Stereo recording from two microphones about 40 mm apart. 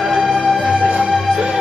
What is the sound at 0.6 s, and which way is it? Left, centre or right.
Music, right.